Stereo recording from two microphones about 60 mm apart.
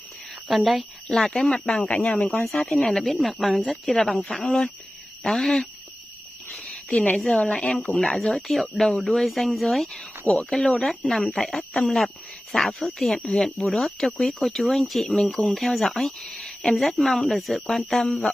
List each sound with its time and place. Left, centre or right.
0.5 s speech: centre
6.6 s a sound: centre
7.2 s speech: centre
8.0 s speech: centre
18.0 s speech: centre